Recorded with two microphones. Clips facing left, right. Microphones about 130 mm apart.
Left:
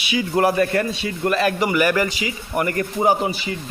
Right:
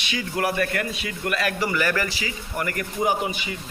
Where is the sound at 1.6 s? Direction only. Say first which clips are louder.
Left 5 dB; 15° left (ahead or behind).